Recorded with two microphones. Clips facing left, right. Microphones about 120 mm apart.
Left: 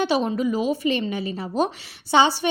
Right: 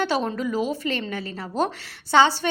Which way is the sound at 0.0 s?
15° left (ahead or behind).